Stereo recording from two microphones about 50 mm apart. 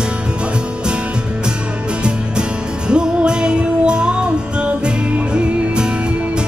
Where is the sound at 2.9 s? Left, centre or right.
Centre.